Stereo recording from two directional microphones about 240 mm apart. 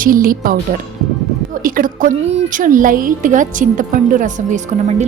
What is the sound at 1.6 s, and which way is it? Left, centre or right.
A woman's voice, right.